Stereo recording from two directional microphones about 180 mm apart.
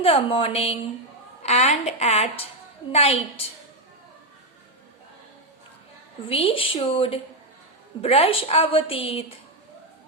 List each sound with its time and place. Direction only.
0.0 s a woman's voice: 30° left (ahead or behind)
6.2 s a woman's voice: 30° left (ahead or behind)